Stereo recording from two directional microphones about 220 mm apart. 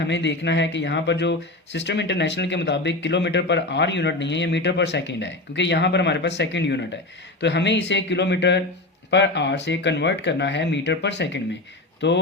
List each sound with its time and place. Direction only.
0.0 s speech: 55° left (ahead or behind)